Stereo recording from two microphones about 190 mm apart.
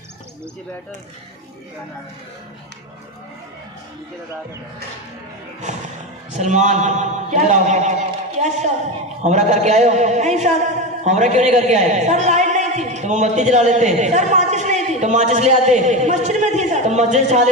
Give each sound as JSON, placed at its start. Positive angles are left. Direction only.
{"t": 6.3, "sound": "a man's voice", "side_deg": -40}